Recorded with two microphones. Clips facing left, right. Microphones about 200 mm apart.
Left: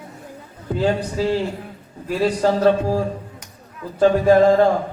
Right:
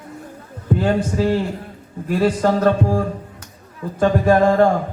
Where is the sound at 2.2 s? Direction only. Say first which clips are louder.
Even; 50° right (ahead or behind).